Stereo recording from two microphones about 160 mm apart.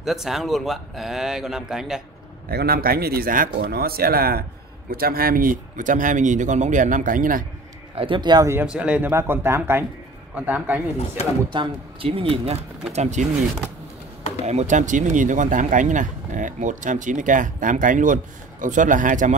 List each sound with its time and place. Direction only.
0.0 s speech: centre (ahead or behind)
2.5 s speech: 75° right (ahead or behind); by 7.4 s 60° right (ahead or behind)
7.9 s a man's voice: 35° right (ahead or behind)
8.5 s speech: 5° right (ahead or behind)
11.5 s speech: 35° right (ahead or behind)
14.4 s speech: 45° right (ahead or behind)